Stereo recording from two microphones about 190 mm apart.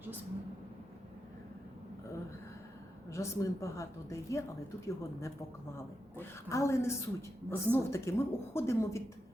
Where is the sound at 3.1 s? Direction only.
15° left (ahead or behind).